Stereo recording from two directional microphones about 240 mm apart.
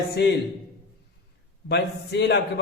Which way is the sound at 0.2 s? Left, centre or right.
Left.